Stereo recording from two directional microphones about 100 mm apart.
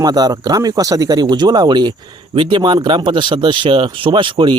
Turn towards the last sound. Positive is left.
turn(degrees=-55)  # may be behind; listen again after turning